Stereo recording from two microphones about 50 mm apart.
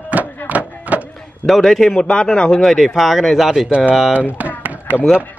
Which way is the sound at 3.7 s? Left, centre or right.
Right.